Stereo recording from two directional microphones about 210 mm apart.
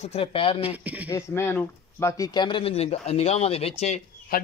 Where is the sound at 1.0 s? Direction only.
10° left (ahead or behind); by 4.4 s 30° left (ahead or behind).